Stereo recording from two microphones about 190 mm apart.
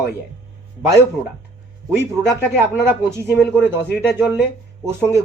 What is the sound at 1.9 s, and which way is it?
Speech, 15° right (ahead or behind).